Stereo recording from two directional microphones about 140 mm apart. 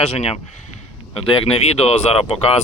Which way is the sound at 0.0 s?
45° left (ahead or behind).